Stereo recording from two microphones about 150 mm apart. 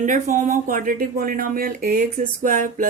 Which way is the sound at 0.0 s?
60° right (ahead or behind).